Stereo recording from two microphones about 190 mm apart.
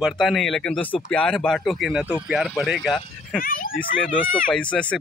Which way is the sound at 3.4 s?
50° left (ahead or behind).